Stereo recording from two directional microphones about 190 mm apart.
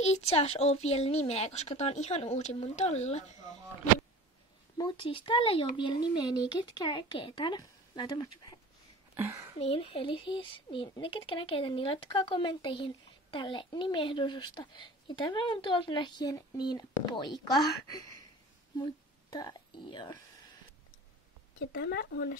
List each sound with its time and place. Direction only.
0.0 s speech: 35° left (ahead or behind)
4.7 s speech: 25° left (ahead or behind)
9.1 s speech: 10° right (ahead or behind)
9.6 s speech: 30° left (ahead or behind)
21.5 s speech: 55° left (ahead or behind)